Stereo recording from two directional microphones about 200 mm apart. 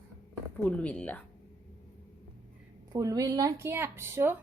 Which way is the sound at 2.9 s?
15° right (ahead or behind).